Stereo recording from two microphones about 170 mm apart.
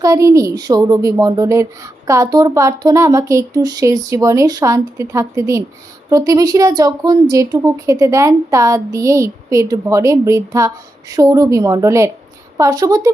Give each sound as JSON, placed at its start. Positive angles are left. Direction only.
{"t": 0.0, "sound": "a woman's voice", "side_deg": -20}